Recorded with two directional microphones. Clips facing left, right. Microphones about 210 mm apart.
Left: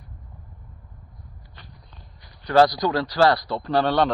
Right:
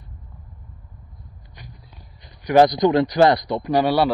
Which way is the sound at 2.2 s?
20° right (ahead or behind).